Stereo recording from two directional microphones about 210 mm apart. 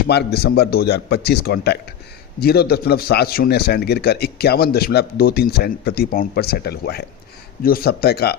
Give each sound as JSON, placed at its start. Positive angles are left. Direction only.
{"t": 0.1, "sound": "a man's voice", "side_deg": 50}